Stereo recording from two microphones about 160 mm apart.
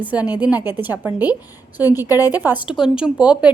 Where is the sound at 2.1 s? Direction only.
20° left (ahead or behind).